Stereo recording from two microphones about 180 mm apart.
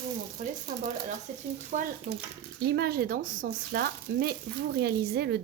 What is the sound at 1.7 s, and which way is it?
Speech, 45° right (ahead or behind).